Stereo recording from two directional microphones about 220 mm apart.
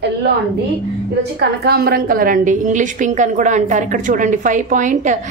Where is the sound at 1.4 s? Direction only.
45° right (ahead or behind).